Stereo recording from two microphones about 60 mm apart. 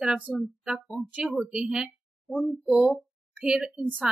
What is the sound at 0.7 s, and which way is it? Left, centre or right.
Speech, centre.